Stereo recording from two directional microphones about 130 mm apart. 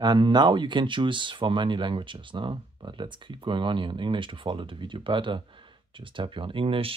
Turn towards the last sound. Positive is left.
turn(degrees=-45)  # may be behind; listen again after turning